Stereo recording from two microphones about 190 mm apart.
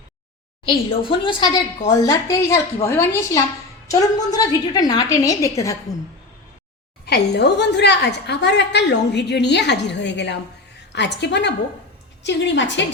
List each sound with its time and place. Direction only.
0.6 s a woman's voice: 25° left (ahead or behind)
7.0 s a woman's voice: 60° left (ahead or behind)